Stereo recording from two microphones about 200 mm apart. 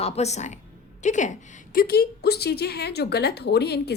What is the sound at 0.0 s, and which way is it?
A woman's voice, 35° left (ahead or behind).